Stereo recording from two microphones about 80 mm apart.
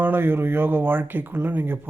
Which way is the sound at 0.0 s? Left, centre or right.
Right.